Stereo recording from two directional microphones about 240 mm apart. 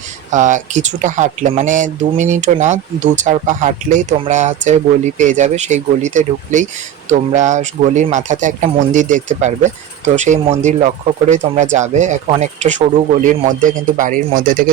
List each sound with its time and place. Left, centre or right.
0.3 s speech: right